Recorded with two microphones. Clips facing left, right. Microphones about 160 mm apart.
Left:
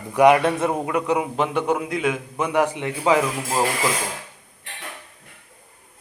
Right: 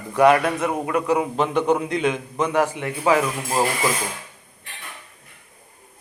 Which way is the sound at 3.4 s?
5° right (ahead or behind).